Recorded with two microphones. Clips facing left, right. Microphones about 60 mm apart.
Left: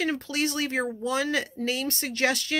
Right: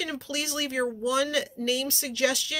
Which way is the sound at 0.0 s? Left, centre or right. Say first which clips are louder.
Left 5 dB; left.